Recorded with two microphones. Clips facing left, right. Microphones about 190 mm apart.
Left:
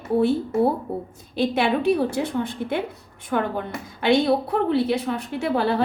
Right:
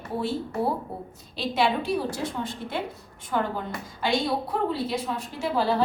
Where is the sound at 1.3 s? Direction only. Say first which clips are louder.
Left 4 dB; 60° left (ahead or behind).